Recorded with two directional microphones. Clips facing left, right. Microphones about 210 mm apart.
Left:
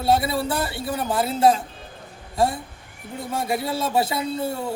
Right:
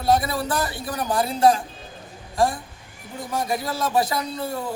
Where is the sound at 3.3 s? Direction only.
25° left (ahead or behind).